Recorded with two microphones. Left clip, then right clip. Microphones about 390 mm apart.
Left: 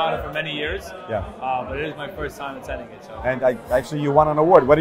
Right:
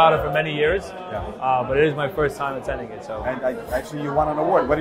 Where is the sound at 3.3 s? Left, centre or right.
Left.